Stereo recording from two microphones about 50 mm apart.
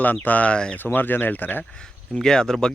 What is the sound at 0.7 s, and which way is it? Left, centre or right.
Speech, left.